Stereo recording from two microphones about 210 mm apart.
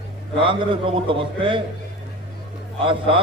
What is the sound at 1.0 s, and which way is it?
Speech, 25° right (ahead or behind).